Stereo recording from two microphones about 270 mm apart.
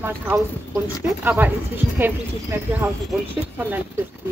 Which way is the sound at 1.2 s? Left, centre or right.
Centre.